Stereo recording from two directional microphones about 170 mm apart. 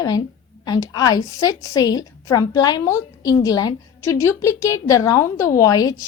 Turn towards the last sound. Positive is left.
turn(degrees=20)  # may be behind; listen again after turning